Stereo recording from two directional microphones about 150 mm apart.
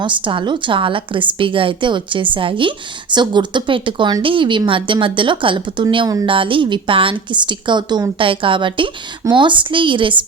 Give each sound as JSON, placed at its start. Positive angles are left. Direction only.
{"t": 0.0, "sound": "a woman's voice", "side_deg": -35}